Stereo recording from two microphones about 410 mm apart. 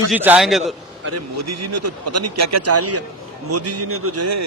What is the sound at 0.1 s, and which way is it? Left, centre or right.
Speech, centre.